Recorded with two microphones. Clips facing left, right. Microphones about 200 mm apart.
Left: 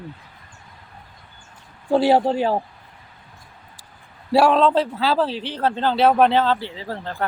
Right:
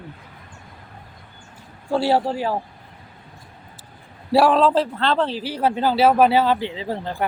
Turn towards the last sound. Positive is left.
turn(degrees=-15)  # may be behind; listen again after turning